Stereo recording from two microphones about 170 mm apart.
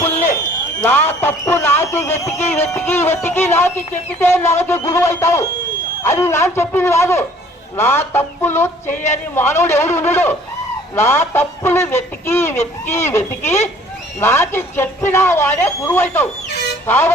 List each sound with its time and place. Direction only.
0.8 s speech: 15° left (ahead or behind)